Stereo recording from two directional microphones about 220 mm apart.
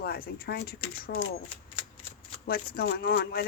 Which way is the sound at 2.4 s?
45° left (ahead or behind).